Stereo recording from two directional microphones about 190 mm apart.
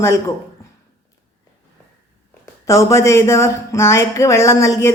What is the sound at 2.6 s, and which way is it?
Speech, 15° left (ahead or behind).